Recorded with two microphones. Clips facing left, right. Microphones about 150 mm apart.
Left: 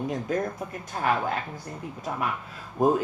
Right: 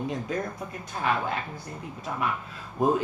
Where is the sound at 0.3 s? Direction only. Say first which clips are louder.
Left 3 dB; 45° left (ahead or behind).